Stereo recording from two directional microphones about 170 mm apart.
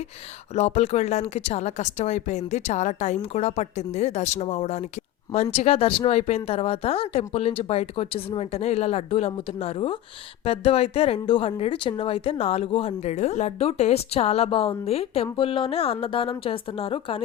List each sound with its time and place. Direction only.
0.5 s speech: 40° left (ahead or behind)